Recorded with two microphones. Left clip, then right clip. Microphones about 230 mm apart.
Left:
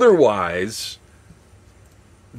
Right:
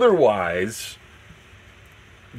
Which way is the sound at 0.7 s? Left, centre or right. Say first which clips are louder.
Left 4 dB; centre.